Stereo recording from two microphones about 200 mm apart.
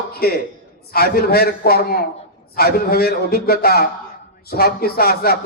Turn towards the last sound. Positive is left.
turn(degrees=50)  # may be behind; listen again after turning